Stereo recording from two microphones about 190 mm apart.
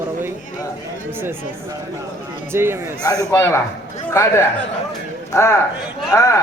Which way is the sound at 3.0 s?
20° left (ahead or behind).